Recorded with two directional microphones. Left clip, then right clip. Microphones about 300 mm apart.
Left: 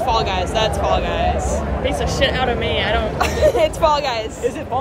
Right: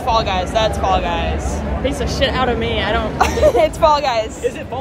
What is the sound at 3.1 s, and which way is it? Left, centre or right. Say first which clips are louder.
Speech: right 4 dB; centre.